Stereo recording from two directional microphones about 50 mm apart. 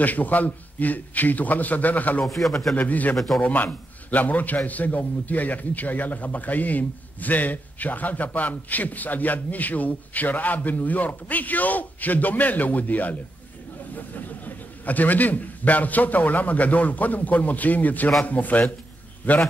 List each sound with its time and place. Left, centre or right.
0.0 s a man's voice: left
2.2 s speech: centre
2.7 s a man's voice: left